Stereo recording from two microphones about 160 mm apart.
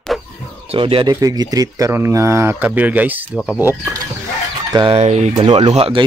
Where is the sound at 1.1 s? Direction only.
20° right (ahead or behind).